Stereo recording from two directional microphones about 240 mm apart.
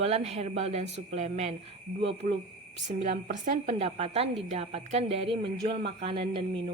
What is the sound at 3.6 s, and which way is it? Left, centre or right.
A woman's voice, right.